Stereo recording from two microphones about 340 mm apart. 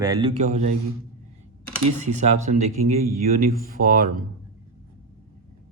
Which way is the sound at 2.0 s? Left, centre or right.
Centre.